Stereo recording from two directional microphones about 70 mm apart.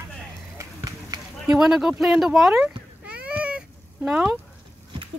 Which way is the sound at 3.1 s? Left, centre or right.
Centre.